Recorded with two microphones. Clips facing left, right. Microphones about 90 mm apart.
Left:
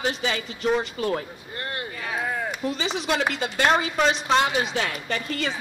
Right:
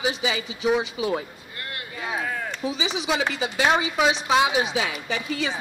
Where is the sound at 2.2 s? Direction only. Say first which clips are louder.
Left 4 dB; 10° left (ahead or behind).